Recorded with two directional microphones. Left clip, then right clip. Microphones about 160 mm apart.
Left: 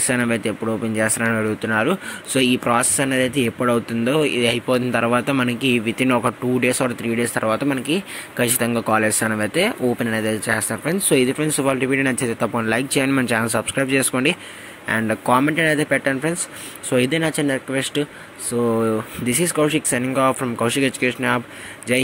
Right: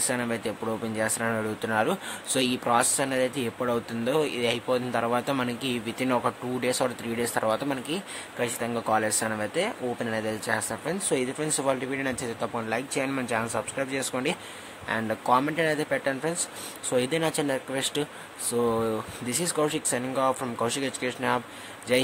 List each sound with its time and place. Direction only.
0.1 s speech: 15° left (ahead or behind)
8.4 s speech: 25° left (ahead or behind)